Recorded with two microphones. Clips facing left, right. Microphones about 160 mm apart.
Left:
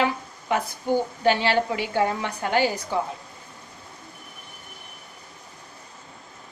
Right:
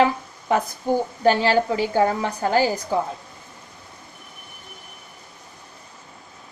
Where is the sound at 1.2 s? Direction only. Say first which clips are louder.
Right 5 dB; 40° right (ahead or behind).